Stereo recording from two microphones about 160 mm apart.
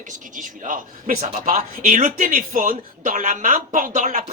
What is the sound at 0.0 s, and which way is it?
Speech, 55° right (ahead or behind).